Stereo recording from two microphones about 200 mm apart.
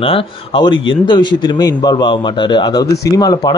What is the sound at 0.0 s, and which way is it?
Speech, 25° left (ahead or behind).